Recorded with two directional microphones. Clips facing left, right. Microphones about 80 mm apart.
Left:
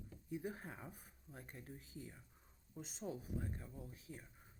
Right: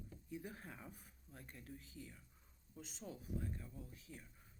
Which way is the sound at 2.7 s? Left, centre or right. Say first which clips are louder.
Left 5 dB; centre.